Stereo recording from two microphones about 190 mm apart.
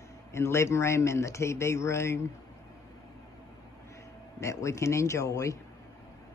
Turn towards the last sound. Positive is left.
turn(degrees=15)  # may be behind; listen again after turning